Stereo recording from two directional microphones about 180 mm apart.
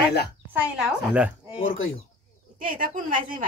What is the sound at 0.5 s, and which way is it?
Speech, 5° right (ahead or behind).